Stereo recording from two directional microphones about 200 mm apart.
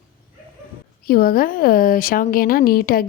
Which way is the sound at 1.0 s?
45° left (ahead or behind).